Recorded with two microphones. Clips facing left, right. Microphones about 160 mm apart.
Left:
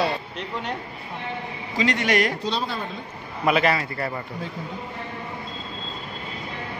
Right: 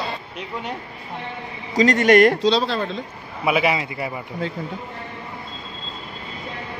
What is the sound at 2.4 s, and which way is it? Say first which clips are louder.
Speech: right 8 dB; 90° right.